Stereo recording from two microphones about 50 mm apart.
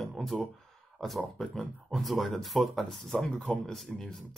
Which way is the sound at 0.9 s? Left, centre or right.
Centre.